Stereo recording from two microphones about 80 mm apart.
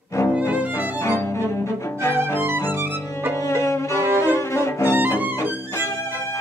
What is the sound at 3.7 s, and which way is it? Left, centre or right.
Music, left.